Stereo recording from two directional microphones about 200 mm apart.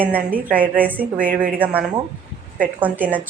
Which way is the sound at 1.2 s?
45° right (ahead or behind).